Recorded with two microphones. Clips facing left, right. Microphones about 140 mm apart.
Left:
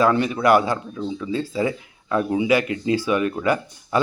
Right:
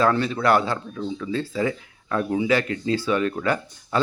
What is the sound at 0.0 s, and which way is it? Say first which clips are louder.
Speech: left 2 dB; 15° left (ahead or behind).